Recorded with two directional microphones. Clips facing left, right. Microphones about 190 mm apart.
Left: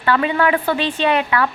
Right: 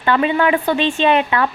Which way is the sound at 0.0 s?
20° right (ahead or behind).